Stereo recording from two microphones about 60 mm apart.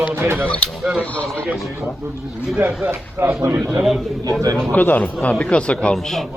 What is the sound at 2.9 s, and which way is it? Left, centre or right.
Speech, right.